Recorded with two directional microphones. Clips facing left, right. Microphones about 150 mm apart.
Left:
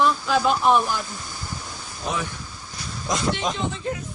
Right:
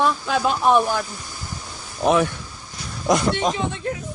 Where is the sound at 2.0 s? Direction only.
70° right (ahead or behind).